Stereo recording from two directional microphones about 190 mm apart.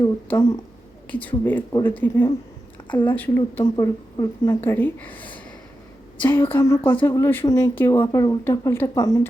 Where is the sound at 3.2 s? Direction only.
10° left (ahead or behind).